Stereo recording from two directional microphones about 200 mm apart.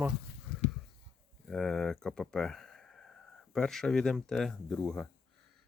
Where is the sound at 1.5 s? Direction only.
Centre (ahead or behind).